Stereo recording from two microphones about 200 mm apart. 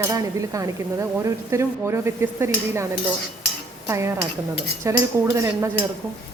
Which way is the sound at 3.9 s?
15° right (ahead or behind).